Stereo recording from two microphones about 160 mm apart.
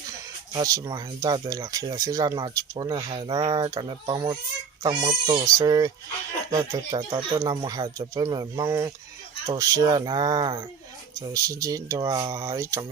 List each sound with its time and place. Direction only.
0.5 s speech: 20° right (ahead or behind)
3.3 s speech: 20° right (ahead or behind)
6.7 s speech: 30° right (ahead or behind)